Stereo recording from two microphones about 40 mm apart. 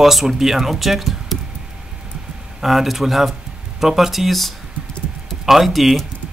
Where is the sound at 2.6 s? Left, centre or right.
Centre.